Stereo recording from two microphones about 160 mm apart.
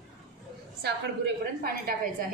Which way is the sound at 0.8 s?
90° right.